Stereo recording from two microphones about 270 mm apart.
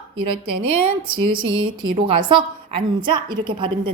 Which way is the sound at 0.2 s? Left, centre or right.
Right.